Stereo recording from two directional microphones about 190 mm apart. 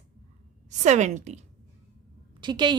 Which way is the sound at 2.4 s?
25° right (ahead or behind).